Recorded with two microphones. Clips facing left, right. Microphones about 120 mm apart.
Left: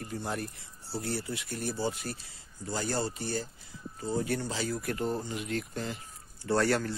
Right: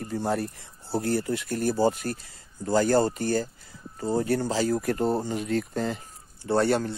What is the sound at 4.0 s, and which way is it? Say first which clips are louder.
Speech: right 6 dB; 40° right (ahead or behind).